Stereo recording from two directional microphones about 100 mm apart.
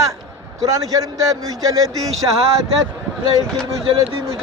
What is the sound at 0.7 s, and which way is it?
Speech, 35° right (ahead or behind).